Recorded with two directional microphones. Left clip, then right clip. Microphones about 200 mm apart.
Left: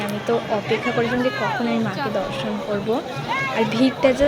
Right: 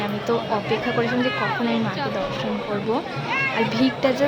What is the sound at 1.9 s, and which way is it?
A woman's voice, 15° left (ahead or behind).